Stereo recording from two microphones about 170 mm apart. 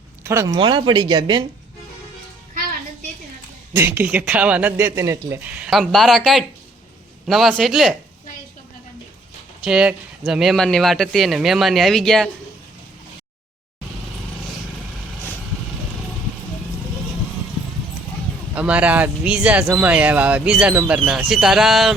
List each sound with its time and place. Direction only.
0.3 s speech: 15° right (ahead or behind)
0.5 s speech: 30° right (ahead or behind)
3.7 s speech: 10° right (ahead or behind)
9.6 s speech: 5° right (ahead or behind)
18.5 s speech: 10° right (ahead or behind)